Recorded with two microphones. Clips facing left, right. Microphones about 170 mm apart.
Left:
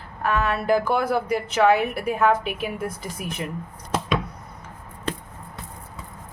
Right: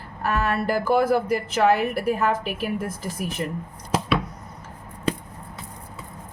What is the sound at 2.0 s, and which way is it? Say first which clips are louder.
A woman's voice: left 5 dB; 40° right (ahead or behind).